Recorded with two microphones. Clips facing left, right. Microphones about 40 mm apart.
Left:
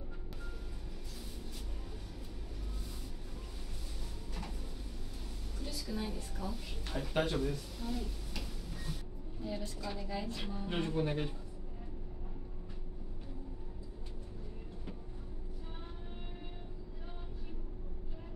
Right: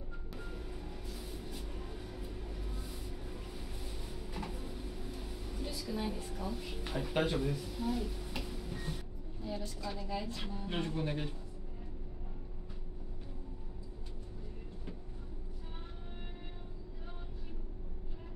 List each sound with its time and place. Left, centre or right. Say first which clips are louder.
4.3 s train: right 3 dB; centre
5.6 s speech: right 2 dB; centre
8.4 s tick-tock: right 4 dB; centre
9.4 s a woman's voice: even; centre